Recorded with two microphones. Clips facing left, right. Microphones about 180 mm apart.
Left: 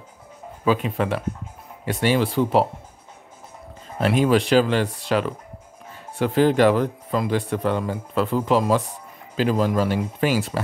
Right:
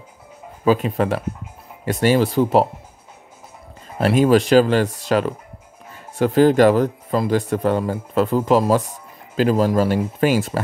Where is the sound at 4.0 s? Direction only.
40° right (ahead or behind).